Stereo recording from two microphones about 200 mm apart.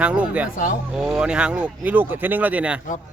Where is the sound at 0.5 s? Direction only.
45° left (ahead or behind).